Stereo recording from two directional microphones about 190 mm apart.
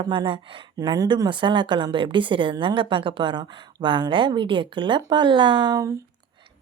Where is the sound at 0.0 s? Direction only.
25° right (ahead or behind).